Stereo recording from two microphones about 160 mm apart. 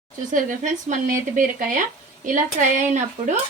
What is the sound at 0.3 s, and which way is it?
Speech, 55° right (ahead or behind).